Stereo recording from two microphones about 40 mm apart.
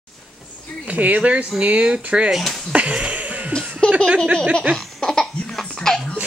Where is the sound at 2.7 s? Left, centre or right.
Right.